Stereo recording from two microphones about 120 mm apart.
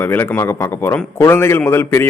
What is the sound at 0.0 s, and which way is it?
A man's voice, 20° left (ahead or behind).